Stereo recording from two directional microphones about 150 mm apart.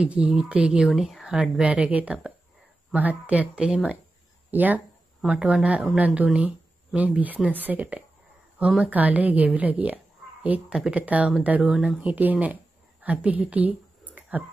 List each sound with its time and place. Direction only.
0.0 s speech: 5° right (ahead or behind)